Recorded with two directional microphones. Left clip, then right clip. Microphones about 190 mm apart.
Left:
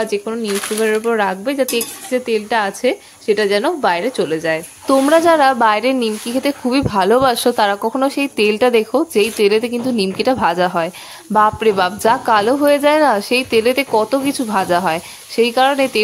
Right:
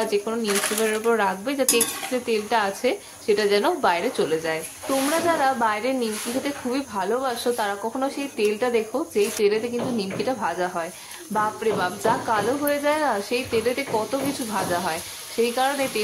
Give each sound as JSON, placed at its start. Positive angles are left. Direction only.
{"t": 0.0, "sound": "speech", "side_deg": 30}
{"t": 5.2, "sound": "speech", "side_deg": 55}